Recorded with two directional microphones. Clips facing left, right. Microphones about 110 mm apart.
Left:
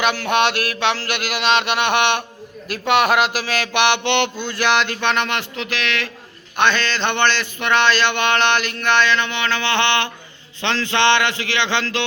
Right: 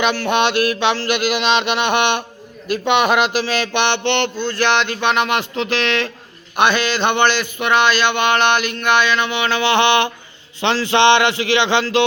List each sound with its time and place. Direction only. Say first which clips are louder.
0.0 s mantra: right 1 dB; centre (ahead or behind)
5.5 s speech: right 5 dB; 30° right (ahead or behind)
6.6 s a sound: right 3 dB; 10° right (ahead or behind)